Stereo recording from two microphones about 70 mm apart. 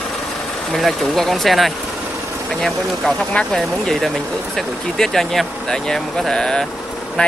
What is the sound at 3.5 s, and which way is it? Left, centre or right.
Speech, centre.